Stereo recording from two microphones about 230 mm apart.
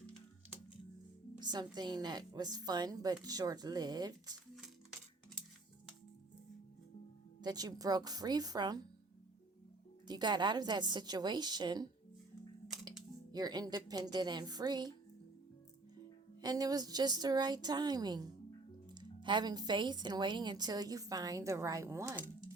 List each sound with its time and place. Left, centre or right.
1.4 s speech: centre
4.5 s music: centre
7.4 s speech: centre
10.1 s a woman's voice: centre
13.3 s speech: centre
16.4 s speech: centre